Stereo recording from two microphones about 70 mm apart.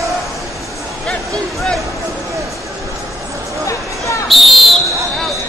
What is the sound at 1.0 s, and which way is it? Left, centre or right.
Music, centre.